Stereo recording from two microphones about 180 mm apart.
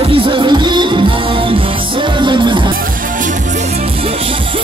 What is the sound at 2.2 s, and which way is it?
Music, 25° right (ahead or behind).